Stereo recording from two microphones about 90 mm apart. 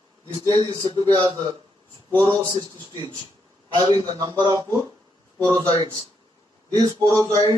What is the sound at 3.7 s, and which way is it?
Speech, 50° right (ahead or behind).